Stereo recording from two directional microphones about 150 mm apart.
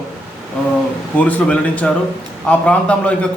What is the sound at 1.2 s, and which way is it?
A man's voice, 10° left (ahead or behind).